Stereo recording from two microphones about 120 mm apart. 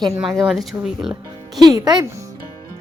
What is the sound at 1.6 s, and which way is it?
Speech, 35° right (ahead or behind).